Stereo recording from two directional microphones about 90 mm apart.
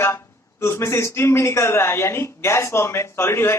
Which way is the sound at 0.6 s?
30° left (ahead or behind).